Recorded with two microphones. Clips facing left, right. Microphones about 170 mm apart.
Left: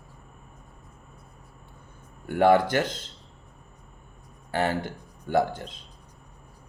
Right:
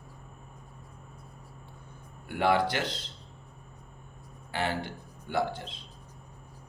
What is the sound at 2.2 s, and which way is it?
Speech, 45° left (ahead or behind).